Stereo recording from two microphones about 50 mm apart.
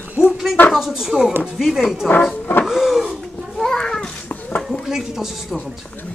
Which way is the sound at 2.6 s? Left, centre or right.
Centre.